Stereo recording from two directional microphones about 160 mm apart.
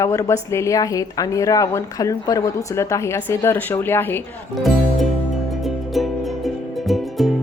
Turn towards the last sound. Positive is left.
turn(degrees=0)  # may be behind; listen again after turning